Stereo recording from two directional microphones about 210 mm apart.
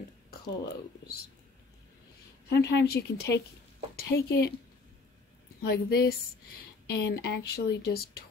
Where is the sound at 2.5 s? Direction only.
50° left (ahead or behind).